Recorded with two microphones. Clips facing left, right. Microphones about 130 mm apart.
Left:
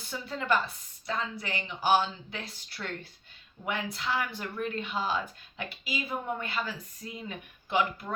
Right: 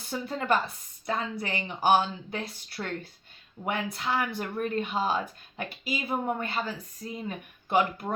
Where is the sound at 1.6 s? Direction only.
45° right (ahead or behind).